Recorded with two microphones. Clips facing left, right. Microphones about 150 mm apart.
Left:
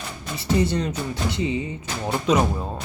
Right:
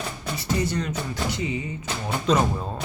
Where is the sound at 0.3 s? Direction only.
30° left (ahead or behind).